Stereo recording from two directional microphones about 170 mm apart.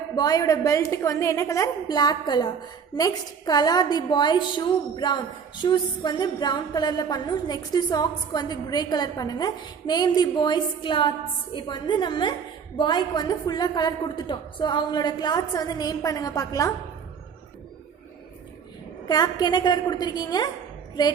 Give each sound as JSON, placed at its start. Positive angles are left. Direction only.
{"t": 0.2, "sound": "a woman's voice", "side_deg": 25}
{"t": 19.0, "sound": "a woman's voice", "side_deg": 25}